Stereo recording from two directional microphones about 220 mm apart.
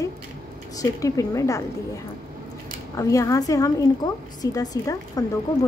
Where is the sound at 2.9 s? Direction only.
15° left (ahead or behind).